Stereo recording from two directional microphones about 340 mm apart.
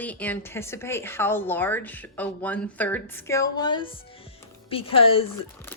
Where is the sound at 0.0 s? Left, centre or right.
Centre.